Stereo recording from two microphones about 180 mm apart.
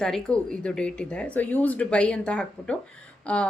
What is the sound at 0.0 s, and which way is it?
A woman's voice, 5° left (ahead or behind).